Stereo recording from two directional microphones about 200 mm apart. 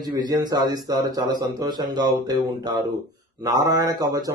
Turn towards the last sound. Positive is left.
turn(degrees=-20)  # may be behind; listen again after turning